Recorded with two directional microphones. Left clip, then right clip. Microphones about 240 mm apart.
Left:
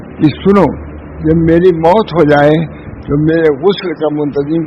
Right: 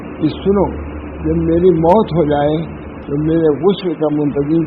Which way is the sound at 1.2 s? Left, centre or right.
Left.